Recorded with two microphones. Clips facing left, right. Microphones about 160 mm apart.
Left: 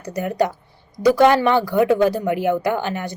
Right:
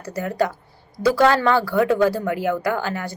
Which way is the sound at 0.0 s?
20° left (ahead or behind).